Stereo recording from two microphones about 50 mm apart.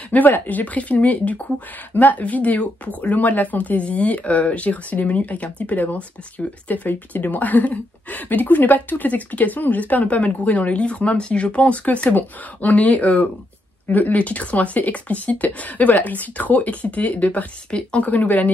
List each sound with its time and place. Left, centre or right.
0.1 s speech: left
17.6 s speech: centre
18.0 s speech: left